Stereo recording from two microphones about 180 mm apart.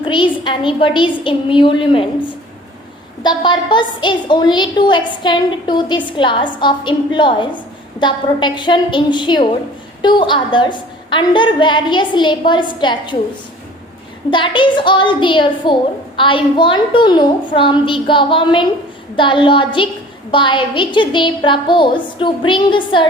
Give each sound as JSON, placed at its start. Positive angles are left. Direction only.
{"t": 0.0, "sound": "a woman's voice", "side_deg": 30}
{"t": 14.3, "sound": "a woman's voice", "side_deg": 25}